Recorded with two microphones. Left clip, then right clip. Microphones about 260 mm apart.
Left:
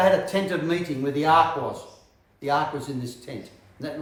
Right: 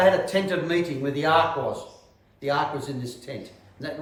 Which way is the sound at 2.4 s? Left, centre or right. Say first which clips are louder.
Left 1 dB; centre.